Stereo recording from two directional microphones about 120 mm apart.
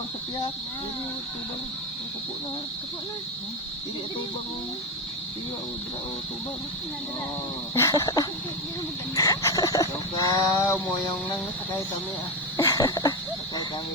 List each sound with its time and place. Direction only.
7.8 s mantra: 25° left (ahead or behind)
8.0 s speech: 30° left (ahead or behind)
10.6 s mantra: 20° left (ahead or behind)
12.5 s cough: 30° left (ahead or behind)